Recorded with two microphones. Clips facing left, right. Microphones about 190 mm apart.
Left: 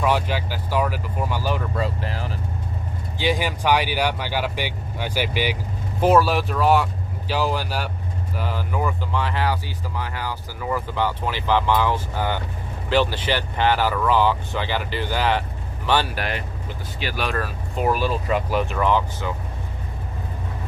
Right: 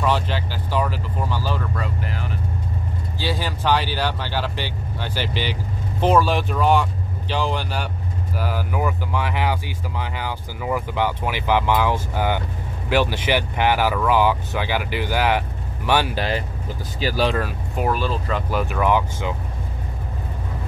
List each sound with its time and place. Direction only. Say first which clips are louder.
0.0 s speech: even; 10° left (ahead or behind)
1.8 s speech: left 2 dB; 35° left (ahead or behind)
3.2 s speech: left 4 dB; 15° left (ahead or behind)
8.4 s speech: right 1 dB; 5° right (ahead or behind)
16.2 s speech: right 4 dB; 30° right (ahead or behind)
17.4 s speech: right 1 dB; 15° right (ahead or behind)
17.8 s speech: left 2 dB; 10° left (ahead or behind)
18.6 s speech: right 1 dB; 10° right (ahead or behind)